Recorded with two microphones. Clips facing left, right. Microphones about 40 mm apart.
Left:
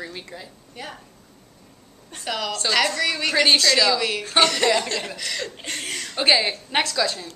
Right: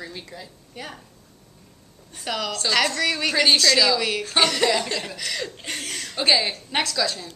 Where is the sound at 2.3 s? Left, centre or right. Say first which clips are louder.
Even; centre.